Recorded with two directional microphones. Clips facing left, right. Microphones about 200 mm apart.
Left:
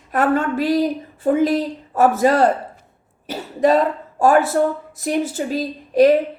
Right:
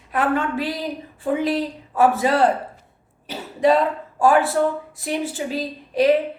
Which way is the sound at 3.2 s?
45° left (ahead or behind).